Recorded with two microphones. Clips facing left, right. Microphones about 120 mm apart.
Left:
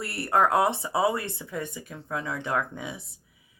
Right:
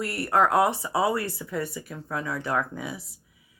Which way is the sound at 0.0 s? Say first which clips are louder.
Right 1 dB; 30° left (ahead or behind).